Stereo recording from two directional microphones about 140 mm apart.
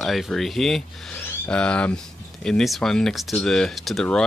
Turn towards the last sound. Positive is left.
turn(degrees=5)  # may be behind; listen again after turning